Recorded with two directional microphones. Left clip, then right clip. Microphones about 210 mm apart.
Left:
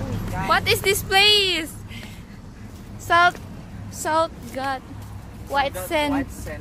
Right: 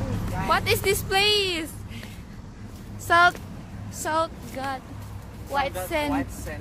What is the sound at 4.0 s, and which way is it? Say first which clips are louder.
Speech: left 4 dB; 20° left (ahead or behind).